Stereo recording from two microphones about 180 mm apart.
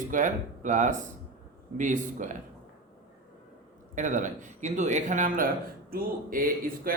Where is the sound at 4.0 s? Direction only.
45° right (ahead or behind).